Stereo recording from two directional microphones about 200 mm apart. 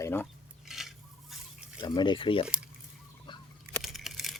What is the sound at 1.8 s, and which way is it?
Speech, 25° left (ahead or behind).